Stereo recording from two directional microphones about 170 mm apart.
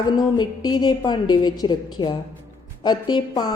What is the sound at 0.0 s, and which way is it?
A woman's voice, 25° left (ahead or behind).